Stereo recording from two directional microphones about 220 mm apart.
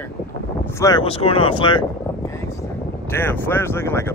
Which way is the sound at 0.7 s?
15° left (ahead or behind).